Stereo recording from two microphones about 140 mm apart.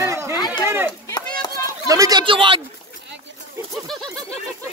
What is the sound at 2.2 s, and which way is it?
Speech, 35° right (ahead or behind).